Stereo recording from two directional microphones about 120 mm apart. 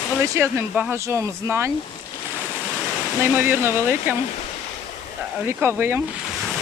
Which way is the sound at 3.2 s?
20° right (ahead or behind).